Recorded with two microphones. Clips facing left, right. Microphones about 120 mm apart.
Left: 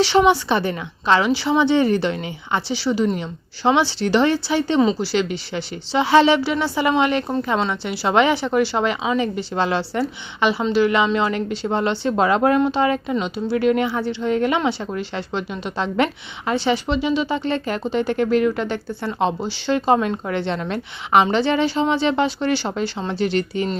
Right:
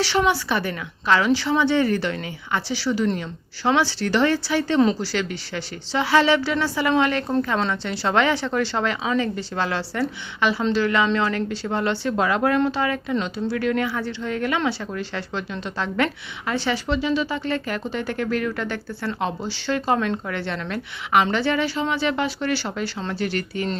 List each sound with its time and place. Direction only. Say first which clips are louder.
0.0 s speech: left 5 dB; 20° left (ahead or behind)